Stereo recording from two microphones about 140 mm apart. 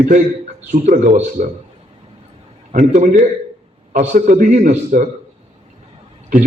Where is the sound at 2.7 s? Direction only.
65° right (ahead or behind).